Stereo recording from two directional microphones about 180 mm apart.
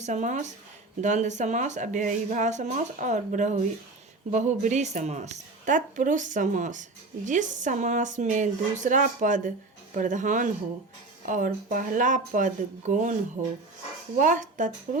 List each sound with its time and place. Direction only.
0.0 s a woman's voice: 40° right (ahead or behind)
14.2 s a woman's voice: 45° right (ahead or behind)